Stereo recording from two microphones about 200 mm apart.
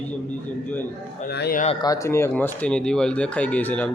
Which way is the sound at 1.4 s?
50° left (ahead or behind).